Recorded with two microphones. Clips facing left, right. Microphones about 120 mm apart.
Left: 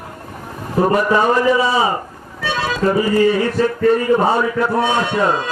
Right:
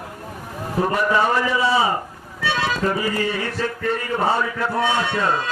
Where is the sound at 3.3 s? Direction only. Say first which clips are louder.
Left 8 dB; 15° left (ahead or behind).